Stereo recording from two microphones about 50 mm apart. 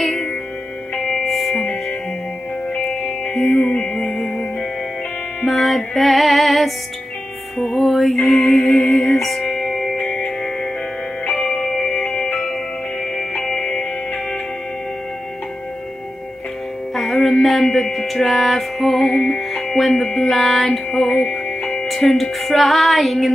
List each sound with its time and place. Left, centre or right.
0.9 s music: centre
2.9 s music: centre
3.4 s music: left; by 6.7 s centre
7.5 s music: centre
9.9 s music: left
13.4 s music: centre
16.9 s music: centre
21.1 s music: centre
21.8 s music: centre